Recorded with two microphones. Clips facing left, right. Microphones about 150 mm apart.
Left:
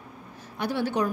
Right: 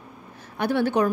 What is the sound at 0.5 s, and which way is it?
Speech, 60° right (ahead or behind).